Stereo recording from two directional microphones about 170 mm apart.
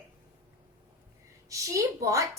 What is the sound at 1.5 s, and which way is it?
Speech, 20° right (ahead or behind).